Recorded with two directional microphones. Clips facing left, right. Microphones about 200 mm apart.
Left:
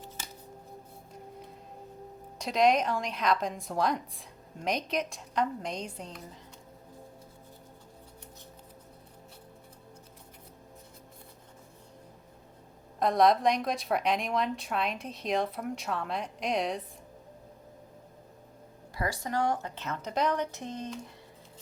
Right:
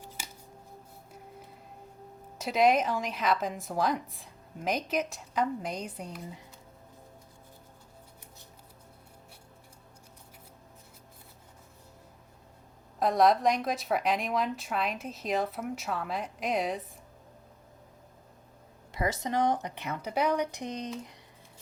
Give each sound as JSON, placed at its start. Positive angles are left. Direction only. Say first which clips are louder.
{"t": 2.4, "sound": "a woman's voice", "louder": "even", "side_deg": -5}
{"t": 13.0, "sound": "a woman's voice", "louder": "even", "side_deg": 0}
{"t": 18.9, "sound": "speech", "louder": "right 2 dB", "side_deg": -20}